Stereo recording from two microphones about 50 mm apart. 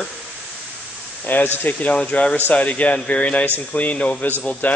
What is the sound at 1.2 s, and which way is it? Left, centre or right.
Speech, left.